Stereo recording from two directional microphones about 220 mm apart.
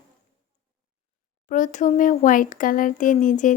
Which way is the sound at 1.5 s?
35° left (ahead or behind).